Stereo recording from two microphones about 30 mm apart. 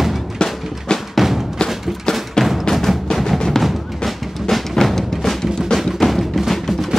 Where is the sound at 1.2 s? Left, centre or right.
Centre.